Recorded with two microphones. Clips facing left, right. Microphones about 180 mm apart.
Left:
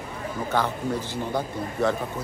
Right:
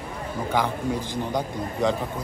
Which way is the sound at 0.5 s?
15° right (ahead or behind).